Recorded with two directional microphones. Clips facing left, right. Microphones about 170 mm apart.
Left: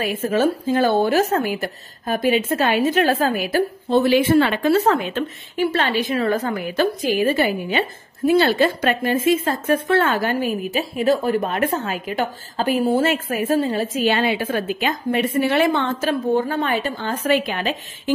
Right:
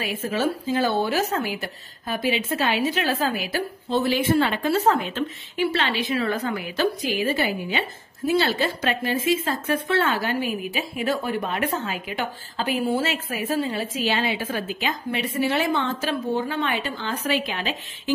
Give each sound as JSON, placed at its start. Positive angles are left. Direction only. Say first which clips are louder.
{"t": 0.0, "sound": "speech", "louder": "left 6 dB", "side_deg": 50}
{"t": 3.9, "sound": "speech", "louder": "left 6 dB", "side_deg": 65}